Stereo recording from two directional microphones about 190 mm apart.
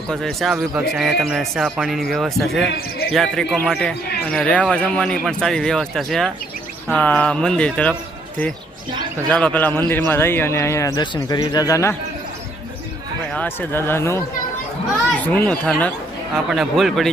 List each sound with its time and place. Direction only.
0.1 s speech: centre (ahead or behind)
9.3 s a man's voice: 5° left (ahead or behind)
13.3 s a man's voice: 10° left (ahead or behind)